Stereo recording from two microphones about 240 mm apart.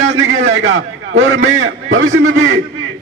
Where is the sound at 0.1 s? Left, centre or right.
Right.